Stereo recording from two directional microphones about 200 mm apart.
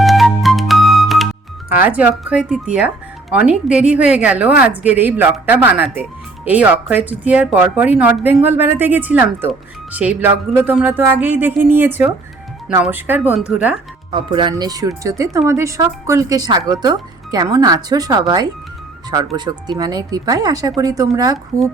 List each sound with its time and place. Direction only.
0.0 s music: centre (ahead or behind)
1.8 s speech: 5° right (ahead or behind)
14.1 s speech: 25° right (ahead or behind)